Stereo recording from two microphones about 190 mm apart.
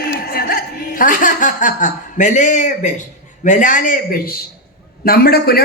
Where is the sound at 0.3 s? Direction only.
50° left (ahead or behind).